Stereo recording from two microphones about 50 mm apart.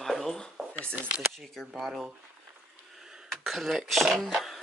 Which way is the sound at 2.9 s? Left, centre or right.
Centre.